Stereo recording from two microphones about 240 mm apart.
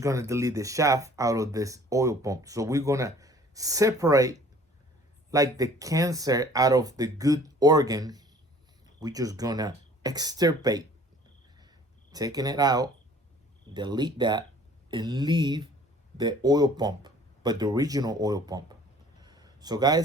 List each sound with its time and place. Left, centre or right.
0.0 s speech: centre
12.1 s speech: centre
19.2 s a sound: centre